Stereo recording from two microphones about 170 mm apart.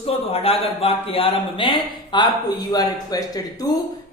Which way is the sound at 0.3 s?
35° left (ahead or behind).